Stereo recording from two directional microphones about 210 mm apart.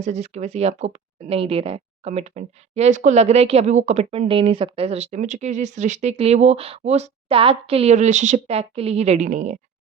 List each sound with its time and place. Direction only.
0.0 s speech: 30° right (ahead or behind)